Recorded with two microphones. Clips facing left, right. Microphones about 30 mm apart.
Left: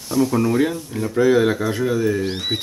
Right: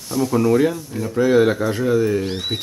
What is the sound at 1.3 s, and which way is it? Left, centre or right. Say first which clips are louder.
Speech: right 1 dB; centre.